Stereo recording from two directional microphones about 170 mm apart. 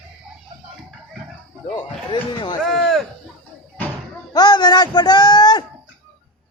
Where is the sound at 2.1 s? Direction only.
25° left (ahead or behind).